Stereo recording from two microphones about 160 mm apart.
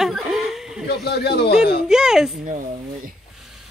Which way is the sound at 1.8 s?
5° right (ahead or behind).